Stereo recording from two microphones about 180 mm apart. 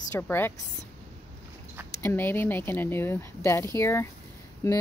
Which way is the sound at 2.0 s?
15° left (ahead or behind).